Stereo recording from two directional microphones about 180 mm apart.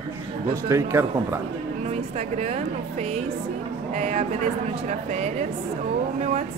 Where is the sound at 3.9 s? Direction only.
35° right (ahead or behind).